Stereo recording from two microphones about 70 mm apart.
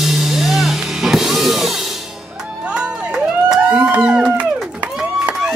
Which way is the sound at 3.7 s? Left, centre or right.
Right.